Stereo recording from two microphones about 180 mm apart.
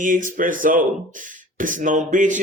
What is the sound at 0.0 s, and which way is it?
Speech, 45° right (ahead or behind).